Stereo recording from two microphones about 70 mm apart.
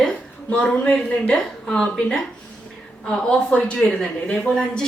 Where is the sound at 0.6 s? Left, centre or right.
Centre.